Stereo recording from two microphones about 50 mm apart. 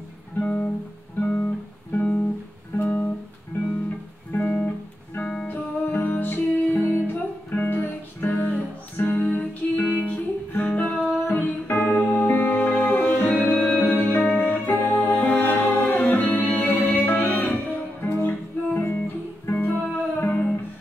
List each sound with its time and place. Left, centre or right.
0.4 s music: left
1.2 s guitar: left
2.8 s music: left
4.3 s music: left
5.2 s music: centre
5.5 s music: left
18.0 s music: left